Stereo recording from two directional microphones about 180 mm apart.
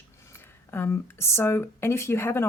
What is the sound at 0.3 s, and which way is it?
Speech, 15° left (ahead or behind).